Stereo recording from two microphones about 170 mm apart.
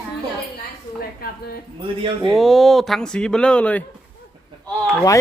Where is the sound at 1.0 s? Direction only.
65° left (ahead or behind).